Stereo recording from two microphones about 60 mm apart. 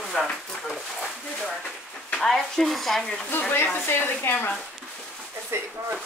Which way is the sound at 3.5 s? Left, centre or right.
Left.